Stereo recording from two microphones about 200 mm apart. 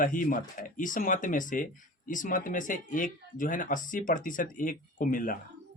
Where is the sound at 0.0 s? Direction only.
40° left (ahead or behind).